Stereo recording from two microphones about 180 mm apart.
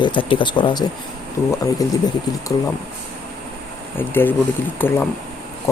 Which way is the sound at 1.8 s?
20° left (ahead or behind).